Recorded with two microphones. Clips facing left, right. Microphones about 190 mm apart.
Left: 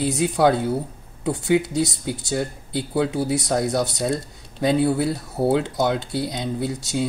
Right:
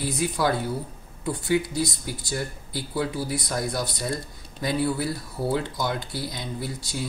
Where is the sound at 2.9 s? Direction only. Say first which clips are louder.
Left 6 dB; 65° left (ahead or behind).